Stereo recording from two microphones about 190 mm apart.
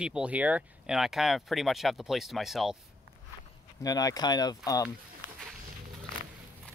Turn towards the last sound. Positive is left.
turn(degrees=20)  # may be behind; listen again after turning